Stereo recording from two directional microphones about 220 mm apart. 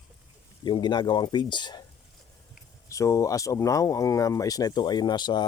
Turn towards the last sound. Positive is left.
turn(degrees=20)  # may be behind; listen again after turning